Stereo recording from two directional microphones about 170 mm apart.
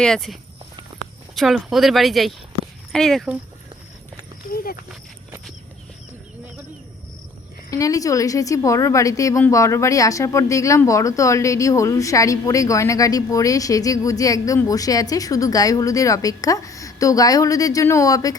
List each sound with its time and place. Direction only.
0.0 s speech: centre (ahead or behind)
1.4 s speech: centre (ahead or behind)
4.5 s speech: 60° left (ahead or behind)
7.7 s a woman's voice: 20° left (ahead or behind)